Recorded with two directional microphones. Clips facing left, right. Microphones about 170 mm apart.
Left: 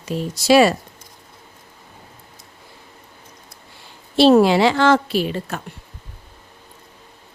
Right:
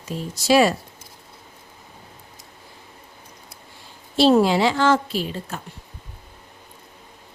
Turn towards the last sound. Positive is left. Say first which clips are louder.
# left 5 dB
turn(degrees=70)  # may be behind; listen again after turning